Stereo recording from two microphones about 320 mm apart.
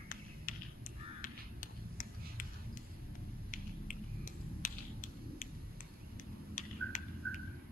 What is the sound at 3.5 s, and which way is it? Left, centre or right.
Finger snapping, left.